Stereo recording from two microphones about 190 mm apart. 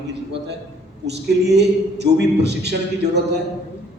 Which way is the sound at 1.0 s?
60° right (ahead or behind).